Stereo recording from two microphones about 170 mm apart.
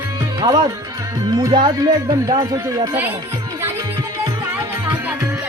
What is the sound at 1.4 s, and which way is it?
Speech, 25° right (ahead or behind).